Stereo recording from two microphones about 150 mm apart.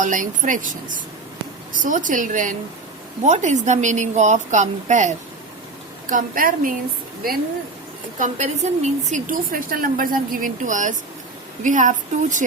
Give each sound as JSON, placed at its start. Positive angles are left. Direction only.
{"t": 0.0, "sound": "a woman's voice", "side_deg": -60}
{"t": 6.1, "sound": "a woman's voice", "side_deg": -65}
{"t": 8.2, "sound": "a woman's voice", "side_deg": -50}